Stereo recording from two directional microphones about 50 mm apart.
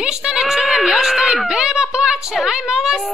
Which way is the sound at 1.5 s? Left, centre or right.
Centre.